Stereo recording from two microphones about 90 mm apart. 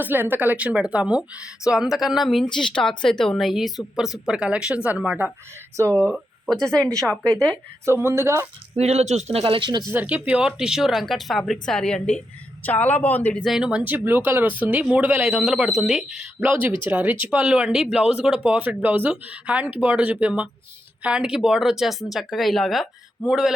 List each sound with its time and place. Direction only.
0.0 s speech: 20° right (ahead or behind)
5.7 s speech: 30° right (ahead or behind)
6.1 s speech: centre (ahead or behind)
7.9 s speech: 30° right (ahead or behind)
9.3 s speech: 90° right; by 9.8 s 60° right (ahead or behind)
9.9 s a woman's voice: 20° right (ahead or behind); by 12.2 s 10° left (ahead or behind)
12.6 s speech: 20° left (ahead or behind)
13.4 s speech: 5° right (ahead or behind); by 17.4 s 20° right (ahead or behind)
17.4 s speech: 10° right (ahead or behind)